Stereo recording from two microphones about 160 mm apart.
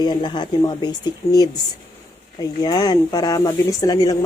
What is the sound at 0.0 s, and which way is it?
A woman's voice, 25° left (ahead or behind).